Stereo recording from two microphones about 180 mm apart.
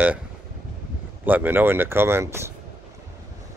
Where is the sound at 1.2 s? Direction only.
10° right (ahead or behind).